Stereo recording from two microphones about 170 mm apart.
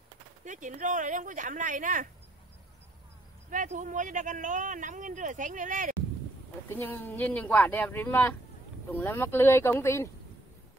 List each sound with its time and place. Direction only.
0.5 s speech: 50° right (ahead or behind)
3.4 s speech: 45° right (ahead or behind)
6.7 s speech: 10° left (ahead or behind)